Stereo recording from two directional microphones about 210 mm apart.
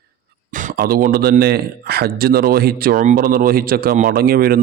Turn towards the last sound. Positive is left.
turn(degrees=-45)  # may be behind; listen again after turning